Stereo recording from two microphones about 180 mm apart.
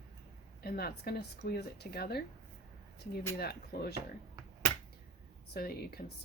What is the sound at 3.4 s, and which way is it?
Speech, 60° left (ahead or behind).